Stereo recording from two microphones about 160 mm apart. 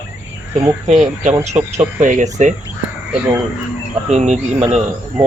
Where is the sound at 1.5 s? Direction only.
20° right (ahead or behind).